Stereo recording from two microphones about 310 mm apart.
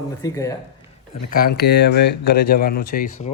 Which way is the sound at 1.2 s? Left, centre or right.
Left.